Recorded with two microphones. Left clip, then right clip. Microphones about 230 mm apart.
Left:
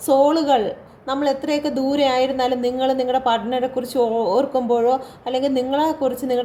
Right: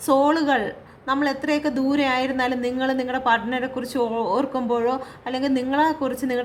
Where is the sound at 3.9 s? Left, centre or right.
Right.